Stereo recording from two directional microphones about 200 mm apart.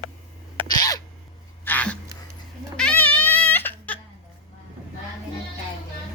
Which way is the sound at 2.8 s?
5° left (ahead or behind).